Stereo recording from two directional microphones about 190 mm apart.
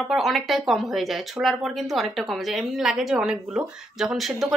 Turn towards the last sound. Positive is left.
turn(degrees=0)  # may be behind; listen again after turning